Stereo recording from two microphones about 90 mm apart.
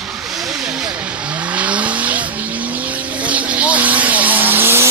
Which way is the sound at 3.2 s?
15° right (ahead or behind).